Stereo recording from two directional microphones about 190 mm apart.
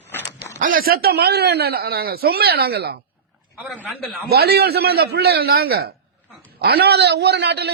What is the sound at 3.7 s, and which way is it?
Speech, 10° right (ahead or behind).